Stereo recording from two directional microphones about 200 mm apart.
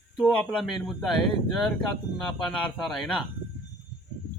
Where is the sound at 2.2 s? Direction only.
Centre (ahead or behind).